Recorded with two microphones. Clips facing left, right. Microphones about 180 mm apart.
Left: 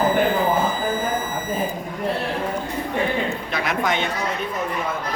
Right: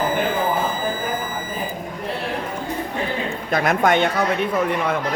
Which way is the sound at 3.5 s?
50° right (ahead or behind).